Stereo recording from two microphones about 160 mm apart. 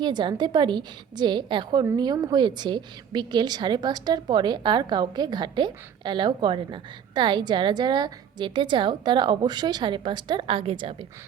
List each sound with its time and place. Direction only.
0.0 s a woman's voice: 30° right (ahead or behind)